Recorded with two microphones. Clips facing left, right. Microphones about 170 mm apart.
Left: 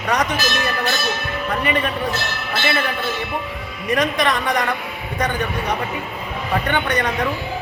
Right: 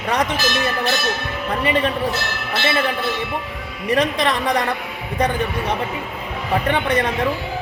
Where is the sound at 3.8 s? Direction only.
30° right (ahead or behind).